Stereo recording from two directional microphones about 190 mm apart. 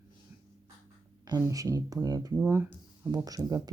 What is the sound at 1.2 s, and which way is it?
Speech, 20° right (ahead or behind).